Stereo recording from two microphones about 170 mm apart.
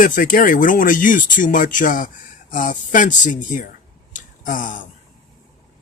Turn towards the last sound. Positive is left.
turn(degrees=50)  # may be behind; listen again after turning